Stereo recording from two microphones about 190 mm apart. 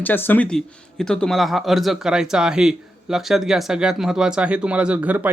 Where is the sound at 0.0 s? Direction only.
10° left (ahead or behind).